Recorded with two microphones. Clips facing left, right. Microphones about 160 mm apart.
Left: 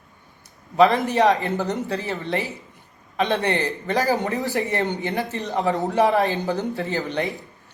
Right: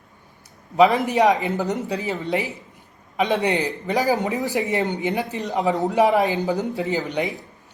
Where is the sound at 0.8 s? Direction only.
15° right (ahead or behind).